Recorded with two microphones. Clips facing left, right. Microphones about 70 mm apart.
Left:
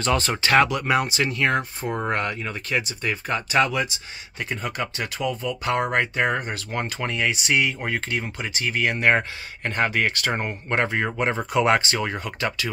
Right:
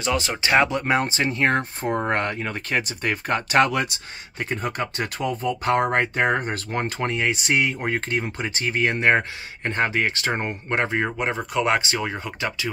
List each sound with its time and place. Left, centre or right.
0.0 s speech: centre
0.4 s speech: right
9.7 s speech: centre
11.1 s speech: centre